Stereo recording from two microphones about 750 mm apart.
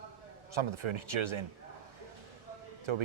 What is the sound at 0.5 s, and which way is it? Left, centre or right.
Speech, right.